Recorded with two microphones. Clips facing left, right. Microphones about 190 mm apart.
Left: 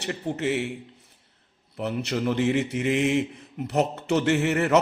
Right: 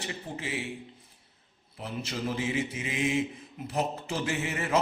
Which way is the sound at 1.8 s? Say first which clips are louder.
Left 7 dB; 70° left (ahead or behind).